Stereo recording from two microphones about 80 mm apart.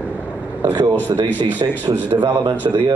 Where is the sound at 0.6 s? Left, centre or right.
Right.